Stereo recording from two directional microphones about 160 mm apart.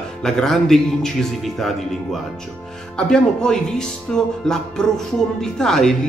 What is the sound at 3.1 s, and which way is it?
Speech, 5° left (ahead or behind).